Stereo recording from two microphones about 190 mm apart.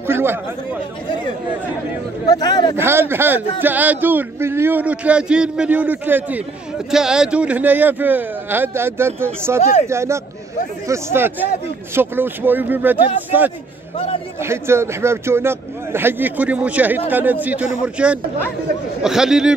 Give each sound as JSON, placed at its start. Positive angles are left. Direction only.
{"t": 0.0, "sound": "speech", "side_deg": -10}
{"t": 2.2, "sound": "speech", "side_deg": 20}
{"t": 2.8, "sound": "speech", "side_deg": -10}
{"t": 9.6, "sound": "speech", "side_deg": 35}
{"t": 9.8, "sound": "speech", "side_deg": -15}
{"t": 14.4, "sound": "speech", "side_deg": -15}